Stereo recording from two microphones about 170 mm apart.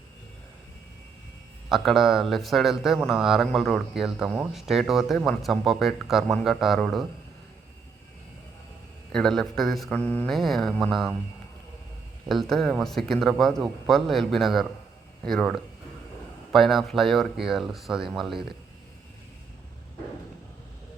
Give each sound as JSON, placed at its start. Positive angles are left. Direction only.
{"t": 1.7, "sound": "speech", "side_deg": 0}
{"t": 9.1, "sound": "speech", "side_deg": 5}
{"t": 12.3, "sound": "speech", "side_deg": 0}